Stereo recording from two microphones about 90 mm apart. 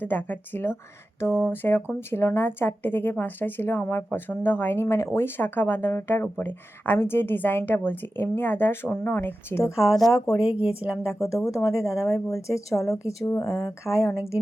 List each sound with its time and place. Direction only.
0.0 s a woman's voice: 20° left (ahead or behind)
10.4 s a woman's voice: 15° right (ahead or behind)
11.1 s a woman's voice: 35° left (ahead or behind)